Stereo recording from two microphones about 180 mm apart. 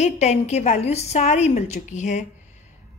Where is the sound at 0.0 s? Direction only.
40° left (ahead or behind).